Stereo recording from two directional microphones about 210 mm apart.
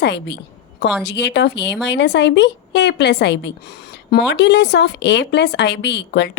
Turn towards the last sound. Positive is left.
turn(degrees=55)  # may be behind; listen again after turning